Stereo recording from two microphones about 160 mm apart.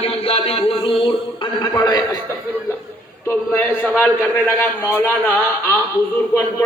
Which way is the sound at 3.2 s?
10° left (ahead or behind).